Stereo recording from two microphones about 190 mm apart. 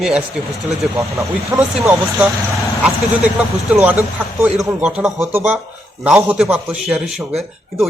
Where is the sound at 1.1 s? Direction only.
15° right (ahead or behind).